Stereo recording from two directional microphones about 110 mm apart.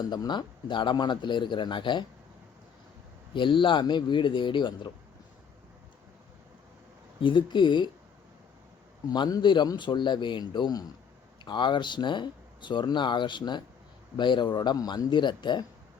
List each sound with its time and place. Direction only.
0.0 s speech: 40° left (ahead or behind)
3.3 s speech: 50° left (ahead or behind)
7.2 s speech: 45° left (ahead or behind)
9.0 s speech: 40° left (ahead or behind)